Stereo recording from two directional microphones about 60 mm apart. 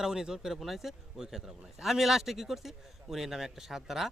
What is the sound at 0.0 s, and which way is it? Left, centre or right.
Speech, centre.